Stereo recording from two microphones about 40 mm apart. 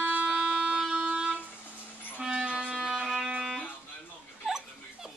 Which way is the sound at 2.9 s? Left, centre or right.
Centre.